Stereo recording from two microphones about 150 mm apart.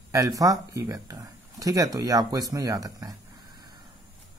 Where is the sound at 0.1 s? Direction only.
25° right (ahead or behind).